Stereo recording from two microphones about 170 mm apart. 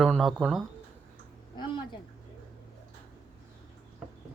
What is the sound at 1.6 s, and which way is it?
Speech, 25° left (ahead or behind).